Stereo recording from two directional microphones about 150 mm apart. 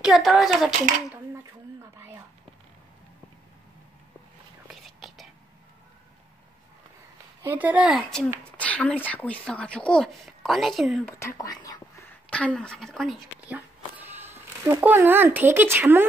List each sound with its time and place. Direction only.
0.0 s speech: 5° right (ahead or behind)
4.8 s whispering: centre (ahead or behind)
7.4 s speech: 10° right (ahead or behind)
11.1 s speech: 20° left (ahead or behind)
12.3 s speech: 5° left (ahead or behind)
13.5 s speech: 10° right (ahead or behind)